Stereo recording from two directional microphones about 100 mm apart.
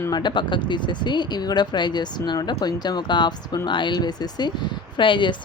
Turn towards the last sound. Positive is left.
turn(degrees=55)  # may be behind; listen again after turning